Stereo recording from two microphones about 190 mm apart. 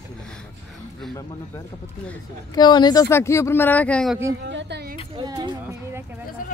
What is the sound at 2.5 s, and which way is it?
Speech, 20° left (ahead or behind).